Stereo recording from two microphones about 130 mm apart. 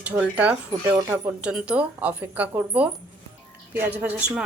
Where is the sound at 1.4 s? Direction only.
10° right (ahead or behind).